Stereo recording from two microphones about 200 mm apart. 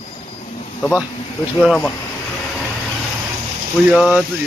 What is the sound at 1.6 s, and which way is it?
Speech, 5° left (ahead or behind).